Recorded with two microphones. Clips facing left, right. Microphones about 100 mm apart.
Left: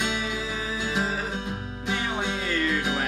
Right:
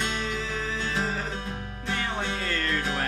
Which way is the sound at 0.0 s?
10° left (ahead or behind).